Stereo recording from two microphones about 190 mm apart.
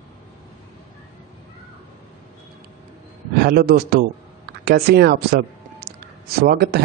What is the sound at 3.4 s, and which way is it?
A man's voice, 55° right (ahead or behind).